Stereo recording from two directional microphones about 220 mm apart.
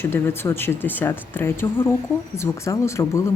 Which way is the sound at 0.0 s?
10° left (ahead or behind).